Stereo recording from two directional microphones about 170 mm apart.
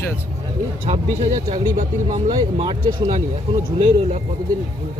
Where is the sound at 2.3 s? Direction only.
30° right (ahead or behind).